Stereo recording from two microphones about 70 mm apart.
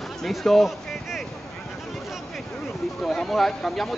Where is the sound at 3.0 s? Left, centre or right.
Centre.